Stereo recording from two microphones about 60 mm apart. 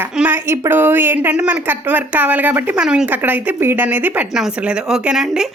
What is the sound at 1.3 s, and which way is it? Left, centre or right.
Speech, right.